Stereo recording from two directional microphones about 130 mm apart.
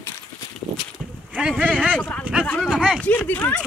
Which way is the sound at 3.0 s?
10° left (ahead or behind).